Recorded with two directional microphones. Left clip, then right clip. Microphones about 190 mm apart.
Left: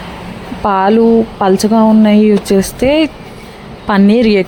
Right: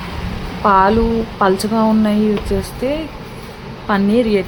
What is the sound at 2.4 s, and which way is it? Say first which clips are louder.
Speech: left 8 dB; 50° left (ahead or behind).